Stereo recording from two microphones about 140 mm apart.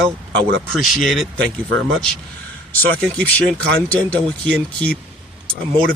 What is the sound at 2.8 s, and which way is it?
Speech, 10° left (ahead or behind).